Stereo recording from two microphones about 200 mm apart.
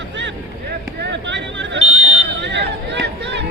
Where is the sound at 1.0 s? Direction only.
60° right (ahead or behind).